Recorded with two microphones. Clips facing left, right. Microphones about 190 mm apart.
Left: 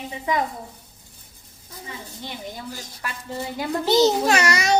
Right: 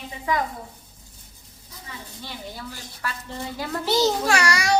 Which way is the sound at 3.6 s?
20° left (ahead or behind).